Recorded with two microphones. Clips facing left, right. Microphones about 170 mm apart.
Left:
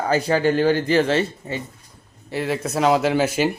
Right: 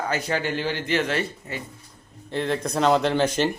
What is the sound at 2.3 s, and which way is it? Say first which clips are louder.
Speech: left 1 dB; 5° left (ahead or behind).